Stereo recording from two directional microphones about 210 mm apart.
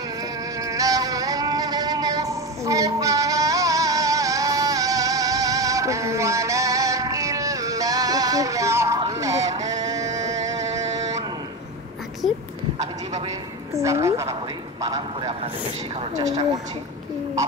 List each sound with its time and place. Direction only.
0.6 s music: 15° right (ahead or behind)
13.8 s a sound: 15° right (ahead or behind)
14.8 s vehicle: 20° right (ahead or behind)